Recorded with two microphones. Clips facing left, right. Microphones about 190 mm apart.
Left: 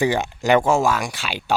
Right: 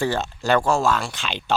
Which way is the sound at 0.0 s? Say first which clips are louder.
Left 3 dB; 15° left (ahead or behind).